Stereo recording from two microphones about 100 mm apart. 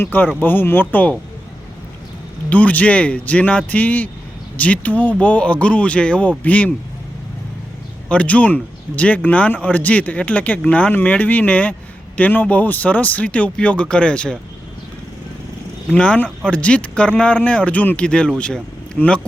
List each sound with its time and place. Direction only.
0.0 s speech: 20° left (ahead or behind)
2.5 s speech: 15° left (ahead or behind)
8.1 s speech: 15° left (ahead or behind)
15.9 s speech: 10° left (ahead or behind)